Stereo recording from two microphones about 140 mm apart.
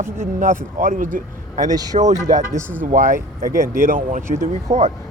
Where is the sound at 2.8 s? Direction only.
70° right (ahead or behind).